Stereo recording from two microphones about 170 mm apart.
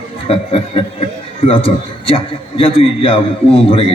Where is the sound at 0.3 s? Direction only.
35° left (ahead or behind).